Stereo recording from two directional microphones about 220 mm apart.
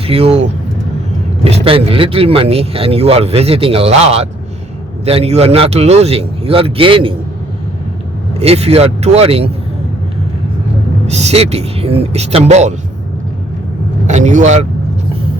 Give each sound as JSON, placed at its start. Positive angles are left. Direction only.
{"t": 0.1, "sound": "speech", "side_deg": -25}
{"t": 8.4, "sound": "speech", "side_deg": -30}
{"t": 11.0, "sound": "speech", "side_deg": -30}
{"t": 14.1, "sound": "speech", "side_deg": -35}